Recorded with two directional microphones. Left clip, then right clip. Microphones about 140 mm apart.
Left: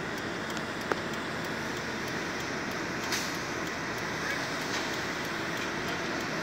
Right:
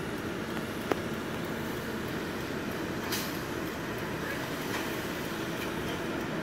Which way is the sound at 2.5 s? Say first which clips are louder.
Left 2 dB; 20° right (ahead or behind).